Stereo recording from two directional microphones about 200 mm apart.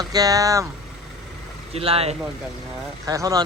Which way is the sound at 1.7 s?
30° right (ahead or behind).